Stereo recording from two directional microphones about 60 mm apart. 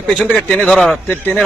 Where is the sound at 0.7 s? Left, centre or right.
Centre.